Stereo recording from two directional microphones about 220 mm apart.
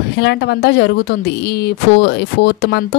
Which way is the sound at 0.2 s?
50° left (ahead or behind).